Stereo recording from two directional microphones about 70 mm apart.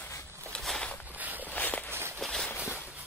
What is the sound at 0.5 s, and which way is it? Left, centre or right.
Walk, centre.